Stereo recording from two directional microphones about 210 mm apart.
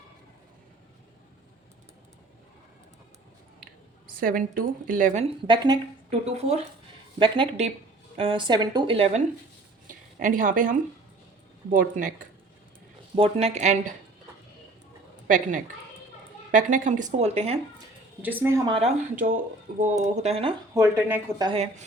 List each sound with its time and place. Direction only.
4.2 s speech: 40° right (ahead or behind)
5.5 s speech: 20° right (ahead or behind)
9.8 s a sound: 40° right (ahead or behind)
11.7 s speech: 40° right (ahead or behind)
13.1 s speech: 25° right (ahead or behind)
15.3 s speech: 40° right (ahead or behind)
18.2 s speech: 10° right (ahead or behind)
19.8 s speech: 30° right (ahead or behind)
20.7 s speech: 10° right (ahead or behind); by 21.8 s 30° right (ahead or behind)